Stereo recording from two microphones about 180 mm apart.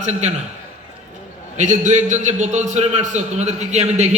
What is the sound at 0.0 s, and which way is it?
Speech, 40° right (ahead or behind).